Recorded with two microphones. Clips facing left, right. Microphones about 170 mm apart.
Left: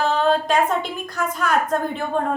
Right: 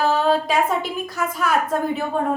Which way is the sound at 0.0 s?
5° right (ahead or behind).